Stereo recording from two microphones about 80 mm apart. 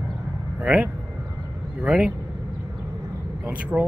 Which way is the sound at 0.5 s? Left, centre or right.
Centre.